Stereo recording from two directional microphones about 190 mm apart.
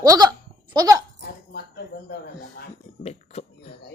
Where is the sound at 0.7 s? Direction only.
20° right (ahead or behind).